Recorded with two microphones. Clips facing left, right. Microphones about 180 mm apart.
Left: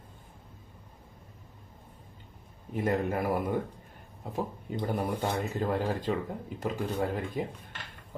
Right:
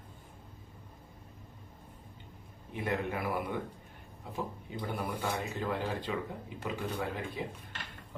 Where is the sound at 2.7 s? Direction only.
45° left (ahead or behind).